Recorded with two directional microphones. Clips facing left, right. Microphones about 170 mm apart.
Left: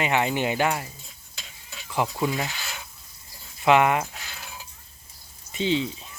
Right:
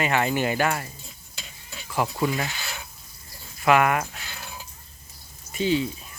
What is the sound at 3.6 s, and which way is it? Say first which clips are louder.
Speech: left 1 dB; 20° left (ahead or behind).